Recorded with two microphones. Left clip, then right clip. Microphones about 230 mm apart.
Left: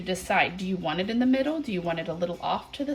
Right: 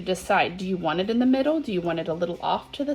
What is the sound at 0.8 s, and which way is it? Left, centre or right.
Speech, centre.